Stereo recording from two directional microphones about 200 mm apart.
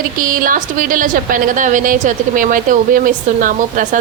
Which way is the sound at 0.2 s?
45° right (ahead or behind).